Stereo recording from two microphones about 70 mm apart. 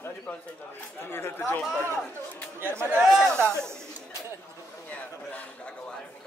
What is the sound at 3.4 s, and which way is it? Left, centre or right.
Speech, right.